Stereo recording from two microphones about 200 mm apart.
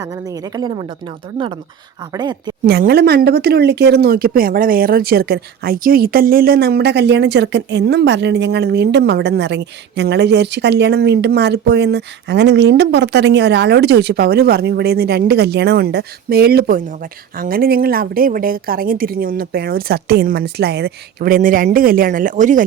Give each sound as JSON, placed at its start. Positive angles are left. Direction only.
{"t": 0.0, "sound": "speech", "side_deg": -15}
{"t": 2.1, "sound": "a woman's voice", "side_deg": -20}
{"t": 2.6, "sound": "speech", "side_deg": -50}